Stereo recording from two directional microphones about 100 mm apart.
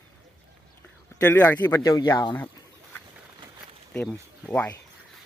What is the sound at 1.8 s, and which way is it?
Speech, 35° left (ahead or behind).